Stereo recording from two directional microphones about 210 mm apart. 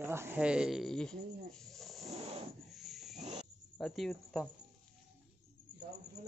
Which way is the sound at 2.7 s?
Centre (ahead or behind).